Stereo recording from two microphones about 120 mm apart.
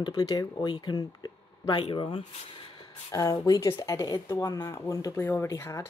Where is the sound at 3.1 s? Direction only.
30° left (ahead or behind).